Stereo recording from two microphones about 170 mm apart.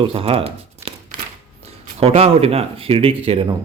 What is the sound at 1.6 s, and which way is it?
Speech, 35° right (ahead or behind).